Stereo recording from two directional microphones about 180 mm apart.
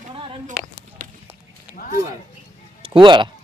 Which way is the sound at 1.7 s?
50° left (ahead or behind).